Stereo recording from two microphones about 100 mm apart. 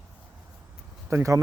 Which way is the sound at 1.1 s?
30° right (ahead or behind).